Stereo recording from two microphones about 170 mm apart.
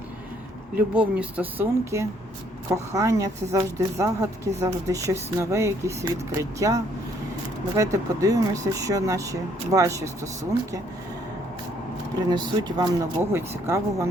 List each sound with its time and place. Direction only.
0.8 s speech: 10° right (ahead or behind)
12.3 s speech: 25° right (ahead or behind)